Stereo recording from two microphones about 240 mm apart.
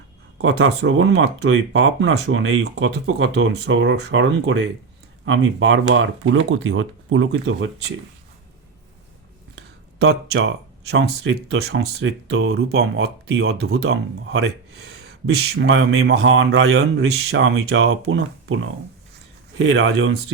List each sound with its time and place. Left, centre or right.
0.4 s speech: right
10.0 s speech: right
19.5 s speech: right